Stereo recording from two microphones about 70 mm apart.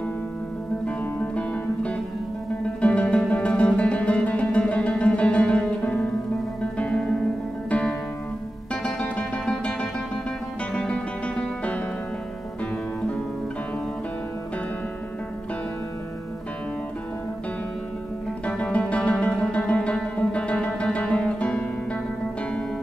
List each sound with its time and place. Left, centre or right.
0.8 s music: centre
8.8 s music: centre
18.4 s music: centre